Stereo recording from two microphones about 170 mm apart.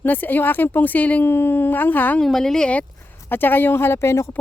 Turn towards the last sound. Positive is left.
turn(degrees=15)  # may be behind; listen again after turning